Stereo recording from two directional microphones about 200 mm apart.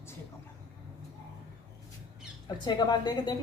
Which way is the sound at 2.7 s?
25° left (ahead or behind).